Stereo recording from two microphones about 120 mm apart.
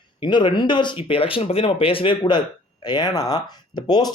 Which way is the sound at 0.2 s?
40° left (ahead or behind).